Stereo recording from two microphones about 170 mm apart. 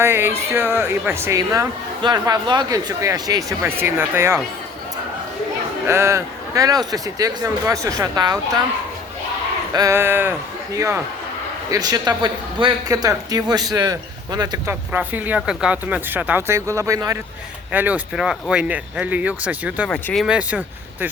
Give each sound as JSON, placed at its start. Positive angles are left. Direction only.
{"t": 0.0, "sound": "speech", "side_deg": -15}
{"t": 5.9, "sound": "a man's voice", "side_deg": -15}
{"t": 9.7, "sound": "a man's voice", "side_deg": -20}
{"t": 14.7, "sound": "speech", "side_deg": -10}
{"t": 19.9, "sound": "speech", "side_deg": 5}
{"t": 20.2, "sound": "speech", "side_deg": -5}